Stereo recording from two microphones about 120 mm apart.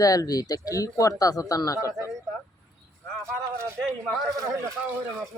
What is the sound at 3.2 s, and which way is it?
Speech, 20° right (ahead or behind).